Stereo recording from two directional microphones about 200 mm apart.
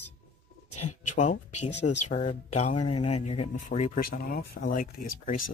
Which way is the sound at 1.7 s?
60° left (ahead or behind).